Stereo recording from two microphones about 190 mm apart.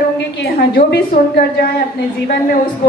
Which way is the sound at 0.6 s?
55° left (ahead or behind).